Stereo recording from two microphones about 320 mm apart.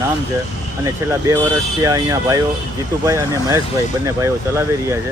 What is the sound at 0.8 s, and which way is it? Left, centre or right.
Speech, centre.